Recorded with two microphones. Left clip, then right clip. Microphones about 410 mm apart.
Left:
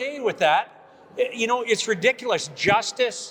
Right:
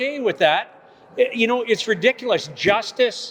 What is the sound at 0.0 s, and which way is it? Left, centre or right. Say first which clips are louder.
A man's voice: right 3 dB; right.